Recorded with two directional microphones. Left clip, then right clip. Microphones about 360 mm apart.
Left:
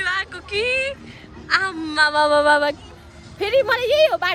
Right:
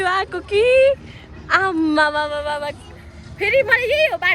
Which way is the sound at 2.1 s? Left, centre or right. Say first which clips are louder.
Left 7 dB; centre.